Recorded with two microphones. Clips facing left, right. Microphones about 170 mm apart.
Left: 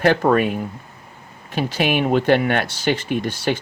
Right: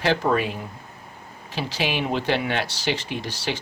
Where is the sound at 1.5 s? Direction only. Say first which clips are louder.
Left 6 dB; 50° left (ahead or behind).